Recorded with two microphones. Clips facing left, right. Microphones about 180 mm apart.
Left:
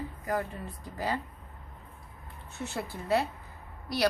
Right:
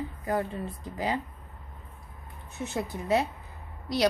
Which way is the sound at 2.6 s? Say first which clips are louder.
Right 4 dB; 20° right (ahead or behind).